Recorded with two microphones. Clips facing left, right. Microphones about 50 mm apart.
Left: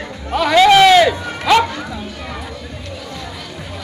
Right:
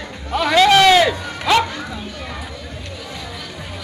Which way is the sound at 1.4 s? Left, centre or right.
Centre.